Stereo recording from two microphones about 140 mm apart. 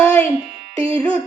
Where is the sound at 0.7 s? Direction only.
40° right (ahead or behind).